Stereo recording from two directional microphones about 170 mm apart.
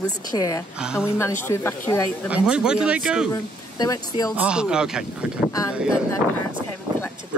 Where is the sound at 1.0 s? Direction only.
15° left (ahead or behind).